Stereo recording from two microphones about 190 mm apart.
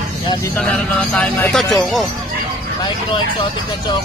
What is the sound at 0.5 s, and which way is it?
Speech, 10° left (ahead or behind).